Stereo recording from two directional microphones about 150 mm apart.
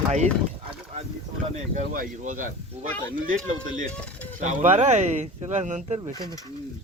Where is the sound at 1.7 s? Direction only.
60° right (ahead or behind).